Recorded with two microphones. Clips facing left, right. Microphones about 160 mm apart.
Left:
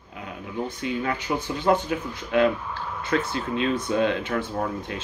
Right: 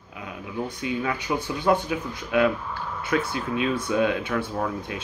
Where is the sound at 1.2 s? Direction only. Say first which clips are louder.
Even; 10° right (ahead or behind).